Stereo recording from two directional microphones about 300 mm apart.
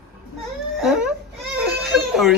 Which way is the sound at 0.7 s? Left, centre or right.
Centre.